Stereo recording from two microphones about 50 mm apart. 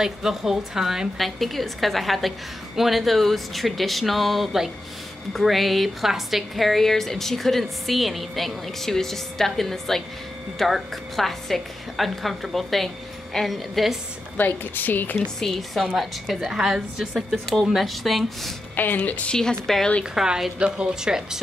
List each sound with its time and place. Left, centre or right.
0.0 s a woman's voice: centre
14.3 s a woman's voice: left
15.4 s a woman's voice: centre
17.5 s a woman's voice: centre
18.9 s a woman's voice: left
19.3 s a woman's voice: centre
20.2 s a woman's voice: centre
20.5 s a woman's voice: right